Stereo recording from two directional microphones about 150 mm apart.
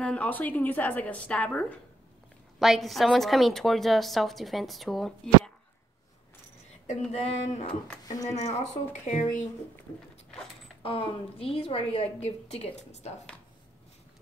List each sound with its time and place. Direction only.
0.0 s a woman's voice: 10° left (ahead or behind)
7.1 s a sound: 45° left (ahead or behind)
10.8 s a woman's voice: 35° left (ahead or behind)